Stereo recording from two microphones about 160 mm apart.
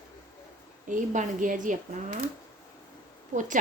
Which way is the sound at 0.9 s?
55° right (ahead or behind).